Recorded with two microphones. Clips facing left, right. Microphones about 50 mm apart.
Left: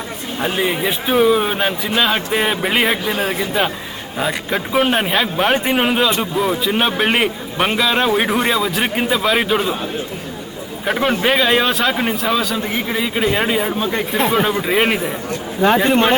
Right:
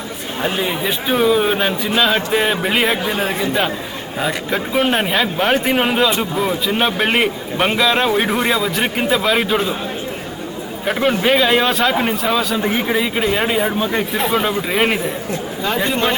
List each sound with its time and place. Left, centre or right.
0.4 s a man's voice: centre
10.8 s a man's voice: centre
15.3 s a man's voice: left